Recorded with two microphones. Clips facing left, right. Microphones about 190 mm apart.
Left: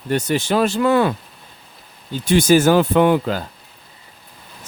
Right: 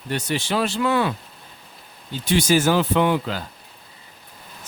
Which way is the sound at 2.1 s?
50° left (ahead or behind).